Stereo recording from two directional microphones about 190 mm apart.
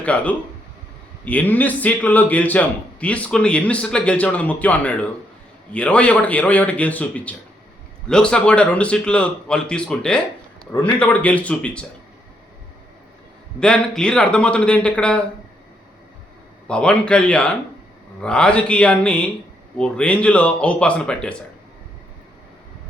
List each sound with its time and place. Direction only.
0.0 s a man's voice: 5° left (ahead or behind)
10.7 s a man's voice: 20° left (ahead or behind)
11.0 s a man's voice: 5° left (ahead or behind)
13.6 s a man's voice: 5° left (ahead or behind)
16.6 s a man's voice: 5° left (ahead or behind)